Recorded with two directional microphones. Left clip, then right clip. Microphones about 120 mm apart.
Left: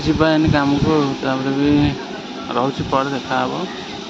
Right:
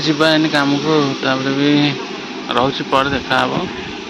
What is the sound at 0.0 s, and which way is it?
Speech, 20° left (ahead or behind).